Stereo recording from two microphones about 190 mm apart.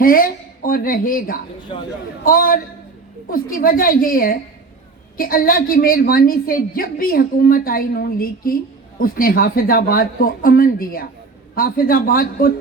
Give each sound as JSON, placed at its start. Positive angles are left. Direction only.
{"t": 0.0, "sound": "a woman's voice", "side_deg": 50}